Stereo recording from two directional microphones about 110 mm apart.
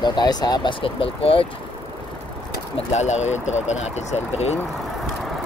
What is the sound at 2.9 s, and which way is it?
Speech, 90° left.